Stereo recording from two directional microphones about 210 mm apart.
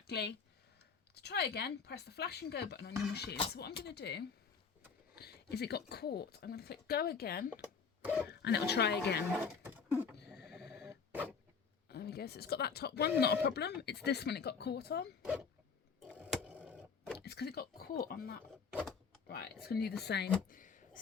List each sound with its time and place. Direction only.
0.1 s speech: 50° left (ahead or behind)
8.0 s speech: 5° right (ahead or behind)
8.3 s speech: 55° left (ahead or behind)
10.2 s a sound: 55° left (ahead or behind)
11.1 s a sound: 10° right (ahead or behind)
11.9 s speech: 50° left (ahead or behind)
15.2 s speech: 5° right (ahead or behind)
16.0 s tick-tock: centre (ahead or behind)
17.2 s speech: 50° left (ahead or behind)
18.7 s a sound: 5° right (ahead or behind)
19.6 s speech: 50° left (ahead or behind)
20.5 s a sound: 40° left (ahead or behind)